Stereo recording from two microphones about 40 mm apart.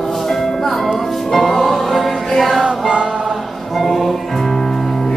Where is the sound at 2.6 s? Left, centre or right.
Right.